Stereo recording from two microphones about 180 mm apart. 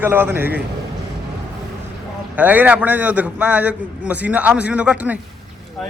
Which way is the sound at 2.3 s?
10° right (ahead or behind).